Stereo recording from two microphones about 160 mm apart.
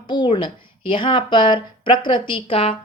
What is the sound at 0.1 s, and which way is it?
A woman's voice, 30° left (ahead or behind).